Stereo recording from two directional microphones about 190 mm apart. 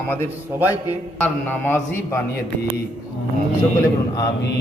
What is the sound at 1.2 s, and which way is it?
A man's voice, 10° left (ahead or behind).